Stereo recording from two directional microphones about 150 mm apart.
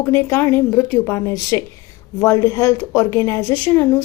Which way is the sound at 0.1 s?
15° left (ahead or behind).